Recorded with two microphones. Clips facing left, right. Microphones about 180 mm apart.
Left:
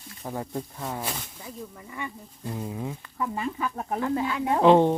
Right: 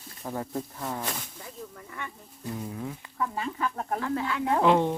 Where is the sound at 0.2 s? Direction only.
10° left (ahead or behind).